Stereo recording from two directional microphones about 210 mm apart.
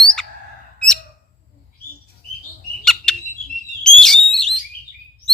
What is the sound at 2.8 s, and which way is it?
Bird, 5° left (ahead or behind).